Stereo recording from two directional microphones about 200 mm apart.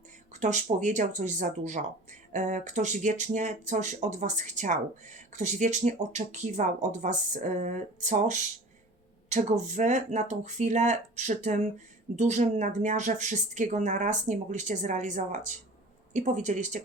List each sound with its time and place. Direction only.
0.3 s speech: 35° right (ahead or behind)